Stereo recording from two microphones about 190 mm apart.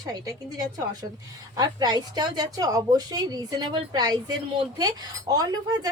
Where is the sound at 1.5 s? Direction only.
20° right (ahead or behind).